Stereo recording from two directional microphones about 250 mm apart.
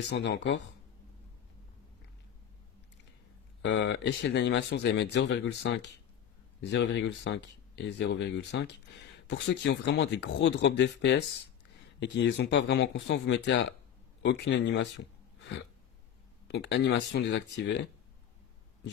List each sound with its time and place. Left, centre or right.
0.1 s speech: left
3.6 s speech: left
16.4 s speech: left